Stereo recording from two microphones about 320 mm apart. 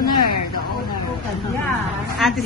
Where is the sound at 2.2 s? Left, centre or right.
Centre.